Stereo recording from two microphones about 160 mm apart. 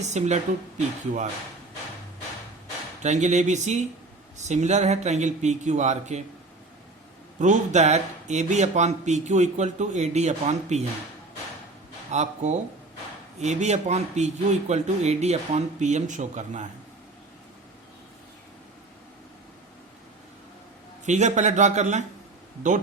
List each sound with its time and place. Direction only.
0.0 s speech: 45° right (ahead or behind)
3.0 s speech: 45° right (ahead or behind)
7.3 s speech: 50° right (ahead or behind)
12.1 s speech: 45° right (ahead or behind)
21.0 s speech: 50° right (ahead or behind)